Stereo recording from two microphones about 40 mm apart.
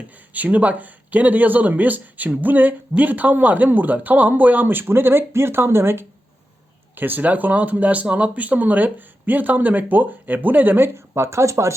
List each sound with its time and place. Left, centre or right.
0.3 s speech: right
6.9 s speech: right
10.8 s speech: right